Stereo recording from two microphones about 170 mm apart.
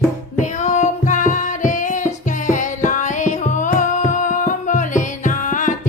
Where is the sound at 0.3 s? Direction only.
45° left (ahead or behind).